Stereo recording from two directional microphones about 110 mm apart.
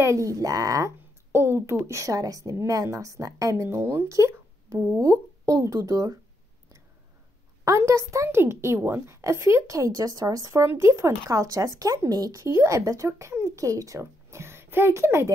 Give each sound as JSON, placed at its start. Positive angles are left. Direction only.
{"t": 0.0, "sound": "a woman's voice", "side_deg": -30}
{"t": 7.6, "sound": "a woman's voice", "side_deg": -25}